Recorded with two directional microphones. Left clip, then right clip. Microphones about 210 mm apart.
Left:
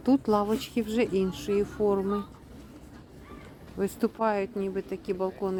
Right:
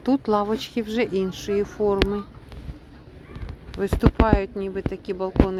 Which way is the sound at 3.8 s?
5° left (ahead or behind).